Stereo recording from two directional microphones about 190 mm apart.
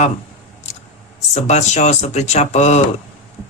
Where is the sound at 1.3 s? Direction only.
35° left (ahead or behind).